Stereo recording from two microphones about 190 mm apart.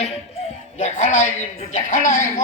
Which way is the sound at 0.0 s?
35° left (ahead or behind).